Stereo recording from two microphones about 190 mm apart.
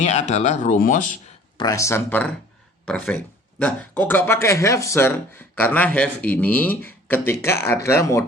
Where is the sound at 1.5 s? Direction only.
20° left (ahead or behind).